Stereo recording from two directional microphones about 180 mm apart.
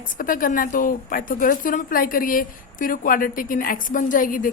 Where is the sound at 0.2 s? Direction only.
50° left (ahead or behind).